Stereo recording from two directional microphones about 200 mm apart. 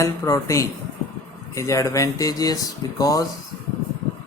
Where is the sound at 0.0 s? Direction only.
15° left (ahead or behind).